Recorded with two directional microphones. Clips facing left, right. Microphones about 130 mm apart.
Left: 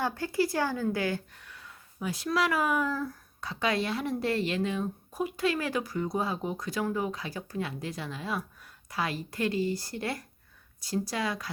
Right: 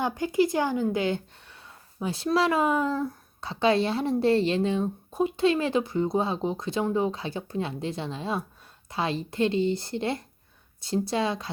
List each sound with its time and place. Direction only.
0.0 s speech: 20° right (ahead or behind)